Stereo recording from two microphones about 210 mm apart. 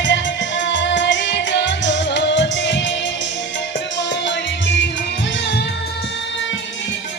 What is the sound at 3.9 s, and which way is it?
Music, 60° left (ahead or behind).